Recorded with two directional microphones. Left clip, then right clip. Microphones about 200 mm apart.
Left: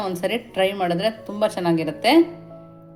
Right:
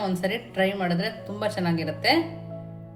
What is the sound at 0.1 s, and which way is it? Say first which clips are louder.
Speech: left 4 dB; 35° left (ahead or behind).